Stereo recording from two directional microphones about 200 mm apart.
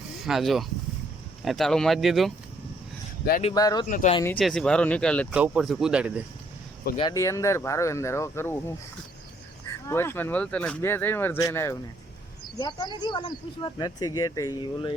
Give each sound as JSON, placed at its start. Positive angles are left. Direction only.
{"t": 0.3, "sound": "speech", "side_deg": 0}
{"t": 3.5, "sound": "speech", "side_deg": 20}
{"t": 3.8, "sound": "speech", "side_deg": 40}
{"t": 4.4, "sound": "speech", "side_deg": 0}
{"t": 5.3, "sound": "speech", "side_deg": -5}
{"t": 7.1, "sound": "speech", "side_deg": 15}
{"t": 9.6, "sound": "speech", "side_deg": 10}